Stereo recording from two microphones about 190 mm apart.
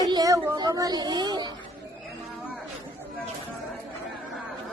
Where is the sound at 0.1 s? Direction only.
20° right (ahead or behind).